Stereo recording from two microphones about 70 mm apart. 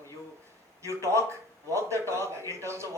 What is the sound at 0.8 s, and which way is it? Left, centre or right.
A man's voice, right.